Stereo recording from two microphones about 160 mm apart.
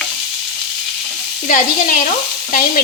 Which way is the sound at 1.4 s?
55° left (ahead or behind).